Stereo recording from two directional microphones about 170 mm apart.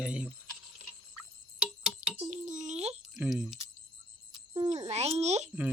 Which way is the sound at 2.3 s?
45° right (ahead or behind).